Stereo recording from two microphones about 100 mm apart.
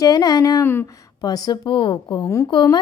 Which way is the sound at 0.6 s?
20° left (ahead or behind).